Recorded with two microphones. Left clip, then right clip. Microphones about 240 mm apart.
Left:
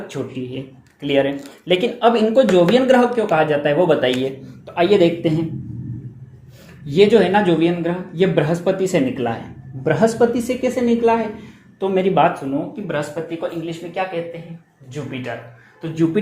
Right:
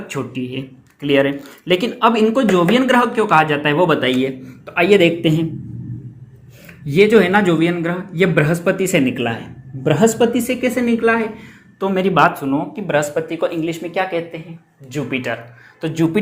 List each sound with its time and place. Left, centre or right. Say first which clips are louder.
0.1 s speech: right 5 dB; right
6.8 s speech: right 1 dB; right